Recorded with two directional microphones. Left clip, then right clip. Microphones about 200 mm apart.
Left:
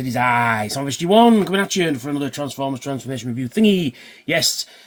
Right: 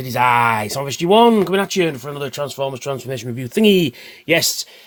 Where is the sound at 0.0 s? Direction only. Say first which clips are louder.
Right 3 dB; 45° right (ahead or behind).